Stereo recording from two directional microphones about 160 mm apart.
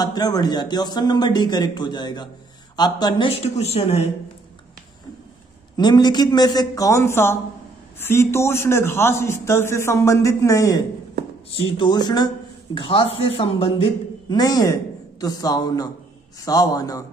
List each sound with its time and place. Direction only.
0.0 s speech: 25° left (ahead or behind); by 4.1 s 40° left (ahead or behind)
5.8 s a man's voice: 25° left (ahead or behind)
14.3 s a man's voice: 25° left (ahead or behind)